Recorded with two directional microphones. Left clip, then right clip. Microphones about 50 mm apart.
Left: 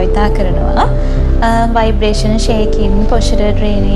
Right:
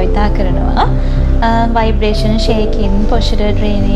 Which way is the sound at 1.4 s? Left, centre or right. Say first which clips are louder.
Left 1 dB; left.